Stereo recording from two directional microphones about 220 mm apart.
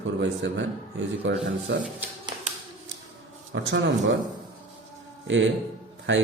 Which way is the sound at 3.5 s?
55° right (ahead or behind).